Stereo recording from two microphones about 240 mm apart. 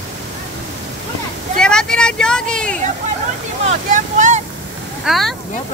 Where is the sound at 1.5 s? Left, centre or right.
Centre.